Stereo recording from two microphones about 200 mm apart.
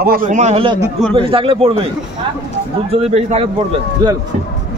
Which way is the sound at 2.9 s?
30° right (ahead or behind).